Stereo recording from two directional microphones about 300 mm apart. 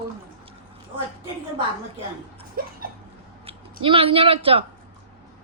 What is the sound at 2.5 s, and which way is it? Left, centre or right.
Speech, right.